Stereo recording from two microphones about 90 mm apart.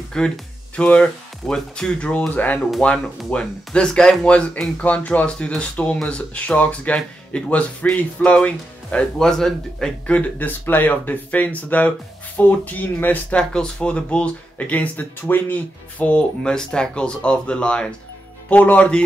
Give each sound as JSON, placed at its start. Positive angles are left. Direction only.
{"t": 0.2, "sound": "speech", "side_deg": 10}